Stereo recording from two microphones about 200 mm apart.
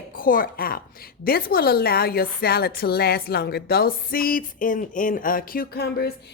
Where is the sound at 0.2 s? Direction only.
45° left (ahead or behind).